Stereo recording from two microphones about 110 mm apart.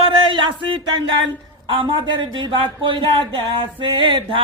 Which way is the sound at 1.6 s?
45° right (ahead or behind).